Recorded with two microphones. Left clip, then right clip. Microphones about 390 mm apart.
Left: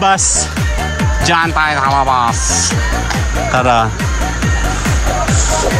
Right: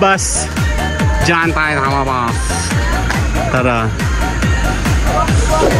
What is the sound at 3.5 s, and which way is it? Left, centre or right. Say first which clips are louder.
Speech: left 4 dB; centre.